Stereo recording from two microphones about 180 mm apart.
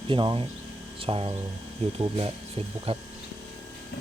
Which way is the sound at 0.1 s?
25° right (ahead or behind).